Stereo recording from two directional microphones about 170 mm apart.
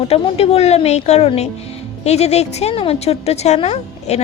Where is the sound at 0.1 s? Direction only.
35° left (ahead or behind).